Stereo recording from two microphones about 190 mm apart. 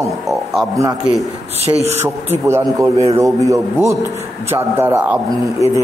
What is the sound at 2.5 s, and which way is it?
A man's voice, 15° right (ahead or behind).